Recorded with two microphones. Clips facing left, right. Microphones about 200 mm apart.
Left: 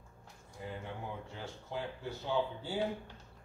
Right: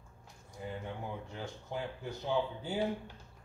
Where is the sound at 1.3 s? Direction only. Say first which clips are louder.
Right 1 dB; 15° right (ahead or behind).